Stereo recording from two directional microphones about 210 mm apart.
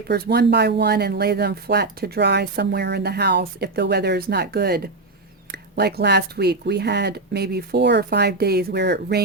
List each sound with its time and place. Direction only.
0.1 s speech: 50° right (ahead or behind)